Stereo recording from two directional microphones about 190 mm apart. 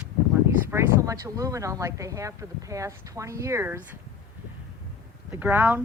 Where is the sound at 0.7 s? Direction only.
15° right (ahead or behind).